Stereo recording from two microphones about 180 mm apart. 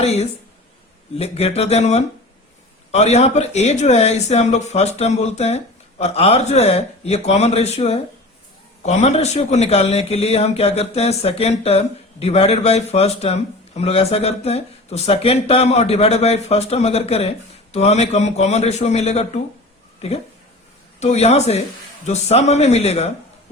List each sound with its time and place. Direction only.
0.0 s speech: 35° left (ahead or behind)